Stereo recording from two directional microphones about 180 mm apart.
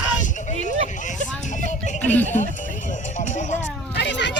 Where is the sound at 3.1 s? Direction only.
45° left (ahead or behind).